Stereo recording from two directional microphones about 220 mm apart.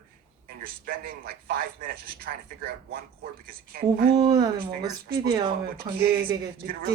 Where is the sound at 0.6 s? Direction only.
40° right (ahead or behind).